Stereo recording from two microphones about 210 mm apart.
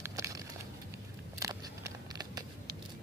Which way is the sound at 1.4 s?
15° right (ahead or behind).